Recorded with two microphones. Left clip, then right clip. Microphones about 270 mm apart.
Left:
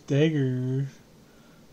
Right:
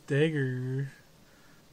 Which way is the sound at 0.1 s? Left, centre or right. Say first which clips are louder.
Left 3 dB; centre.